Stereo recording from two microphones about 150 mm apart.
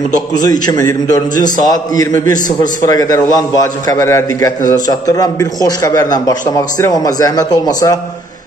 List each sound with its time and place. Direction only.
0.3 s a man's voice: 25° left (ahead or behind)